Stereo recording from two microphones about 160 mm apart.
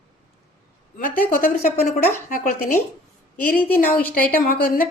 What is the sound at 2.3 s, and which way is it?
Speech, 60° left (ahead or behind).